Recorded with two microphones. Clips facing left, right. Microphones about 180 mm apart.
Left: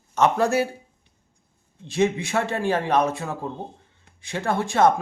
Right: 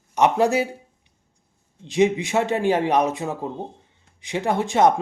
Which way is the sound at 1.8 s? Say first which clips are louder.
Right 3 dB; 20° right (ahead or behind).